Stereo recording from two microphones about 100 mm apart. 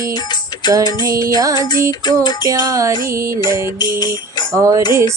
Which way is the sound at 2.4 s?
35° right (ahead or behind).